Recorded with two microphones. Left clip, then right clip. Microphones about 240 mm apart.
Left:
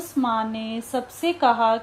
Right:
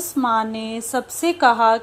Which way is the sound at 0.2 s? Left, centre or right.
Centre.